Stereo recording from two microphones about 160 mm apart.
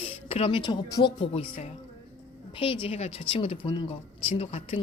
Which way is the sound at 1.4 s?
45° left (ahead or behind).